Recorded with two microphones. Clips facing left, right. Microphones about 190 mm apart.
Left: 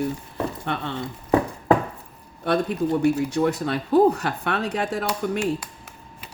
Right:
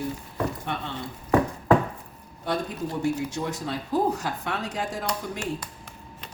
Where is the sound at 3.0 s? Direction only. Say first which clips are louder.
Left 5 dB; 65° left (ahead or behind).